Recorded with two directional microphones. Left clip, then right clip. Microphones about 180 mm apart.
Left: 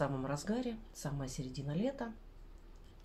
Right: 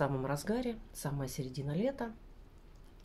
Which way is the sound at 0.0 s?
45° right (ahead or behind).